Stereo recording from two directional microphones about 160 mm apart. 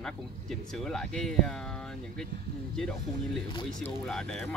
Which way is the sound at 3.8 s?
5° left (ahead or behind).